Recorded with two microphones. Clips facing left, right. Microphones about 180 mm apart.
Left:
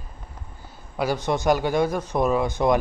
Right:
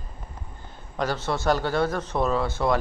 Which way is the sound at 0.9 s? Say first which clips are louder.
Left 3 dB; 10° left (ahead or behind).